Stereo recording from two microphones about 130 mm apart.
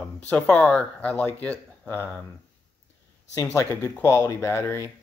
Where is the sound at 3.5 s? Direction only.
30° left (ahead or behind).